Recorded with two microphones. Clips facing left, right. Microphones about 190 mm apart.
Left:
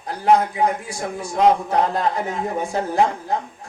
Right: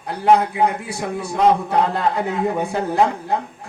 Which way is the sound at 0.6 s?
65° right (ahead or behind).